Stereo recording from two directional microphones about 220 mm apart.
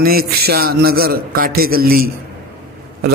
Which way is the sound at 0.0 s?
45° right (ahead or behind).